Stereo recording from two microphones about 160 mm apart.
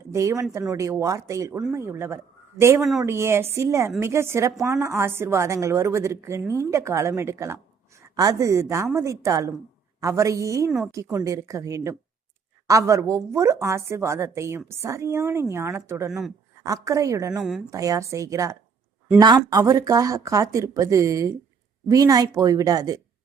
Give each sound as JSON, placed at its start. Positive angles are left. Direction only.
{"t": 0.1, "sound": "a woman's voice", "side_deg": -20}